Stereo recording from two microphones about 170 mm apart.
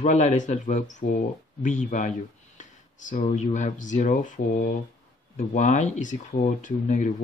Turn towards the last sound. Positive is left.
turn(degrees=50)  # may be behind; listen again after turning